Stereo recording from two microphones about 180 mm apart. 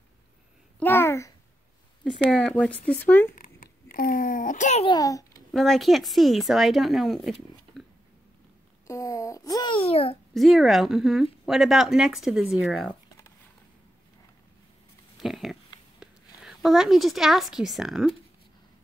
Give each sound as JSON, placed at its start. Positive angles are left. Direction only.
{"t": 0.7, "sound": "a child's voice", "side_deg": 10}
{"t": 2.0, "sound": "speech", "side_deg": 0}
{"t": 3.3, "sound": "a sound", "side_deg": 50}
{"t": 4.8, "sound": "a child's voice", "side_deg": 20}
{"t": 5.5, "sound": "speech", "side_deg": 0}
{"t": 8.8, "sound": "a child's voice", "side_deg": 15}
{"t": 10.3, "sound": "speech", "side_deg": 0}
{"t": 15.1, "sound": "speech", "side_deg": 0}